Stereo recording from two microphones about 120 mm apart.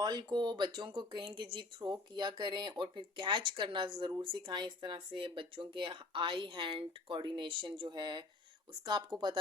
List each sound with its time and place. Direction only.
0.0 s speech: 40° right (ahead or behind)